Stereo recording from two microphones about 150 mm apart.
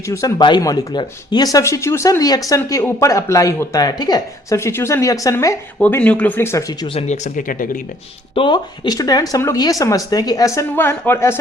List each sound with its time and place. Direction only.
0.1 s speech: 20° left (ahead or behind)
5.8 s speech: 10° left (ahead or behind)
7.1 s speech: 60° left (ahead or behind)
8.4 s speech: 30° left (ahead or behind); by 11.3 s 15° left (ahead or behind)